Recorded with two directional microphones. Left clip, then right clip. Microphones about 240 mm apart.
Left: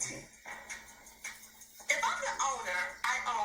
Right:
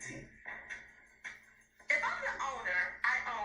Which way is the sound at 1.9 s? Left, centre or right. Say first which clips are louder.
Left 1 dB; centre.